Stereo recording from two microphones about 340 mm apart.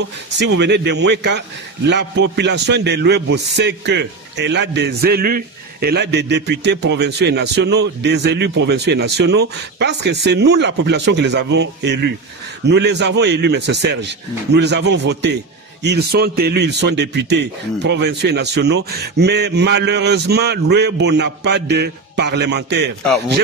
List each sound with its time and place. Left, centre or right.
0.4 s a man's voice: right